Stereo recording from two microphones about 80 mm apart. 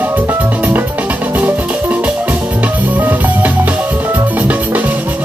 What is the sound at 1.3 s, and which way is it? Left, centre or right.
Music, right.